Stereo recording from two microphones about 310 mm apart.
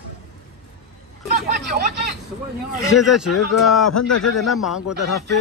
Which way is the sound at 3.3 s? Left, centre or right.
Left.